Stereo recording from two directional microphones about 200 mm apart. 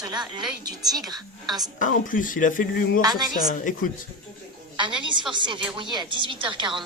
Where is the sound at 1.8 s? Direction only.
40° left (ahead or behind).